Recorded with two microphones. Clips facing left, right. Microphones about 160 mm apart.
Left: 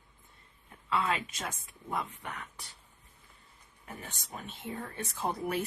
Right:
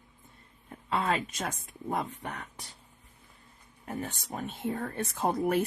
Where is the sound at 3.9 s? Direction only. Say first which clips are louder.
Right 8 dB; 50° right (ahead or behind).